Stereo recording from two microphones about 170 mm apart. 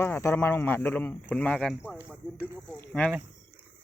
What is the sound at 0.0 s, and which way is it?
Speech, 15° left (ahead or behind).